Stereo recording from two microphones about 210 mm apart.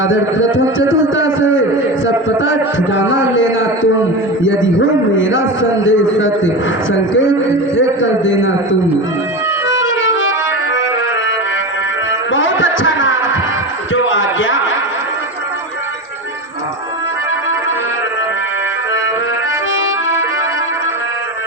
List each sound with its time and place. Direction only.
0.0 s a man's voice: 65° left (ahead or behind)
5.1 s a man's voice: 65° left (ahead or behind)
8.0 s a man's voice: 65° left (ahead or behind)
9.6 s music: 65° left (ahead or behind)
12.3 s a sound: 65° left (ahead or behind)